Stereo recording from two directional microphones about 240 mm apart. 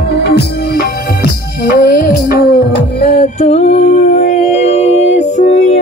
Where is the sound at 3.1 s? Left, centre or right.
Left.